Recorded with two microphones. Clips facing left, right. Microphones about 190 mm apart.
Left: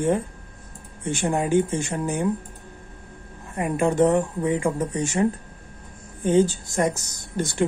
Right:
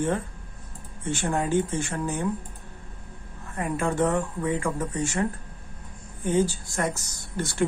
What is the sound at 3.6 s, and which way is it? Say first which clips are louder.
A woman's voice: left 5 dB; 20° left (ahead or behind).